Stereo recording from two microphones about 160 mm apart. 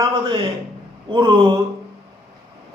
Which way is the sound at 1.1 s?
25° right (ahead or behind).